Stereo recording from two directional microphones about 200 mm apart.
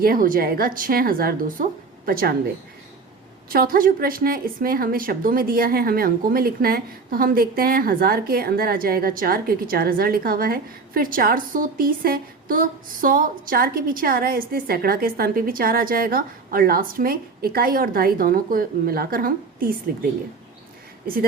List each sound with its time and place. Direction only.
0.0 s a woman's voice: 45° right (ahead or behind)
3.5 s a woman's voice: 45° right (ahead or behind)